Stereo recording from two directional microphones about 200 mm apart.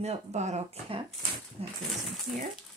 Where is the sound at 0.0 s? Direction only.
35° right (ahead or behind).